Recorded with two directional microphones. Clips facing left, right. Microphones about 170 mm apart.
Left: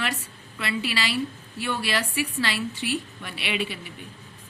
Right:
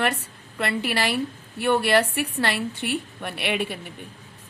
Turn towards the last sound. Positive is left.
turn(degrees=-55)  # may be behind; listen again after turning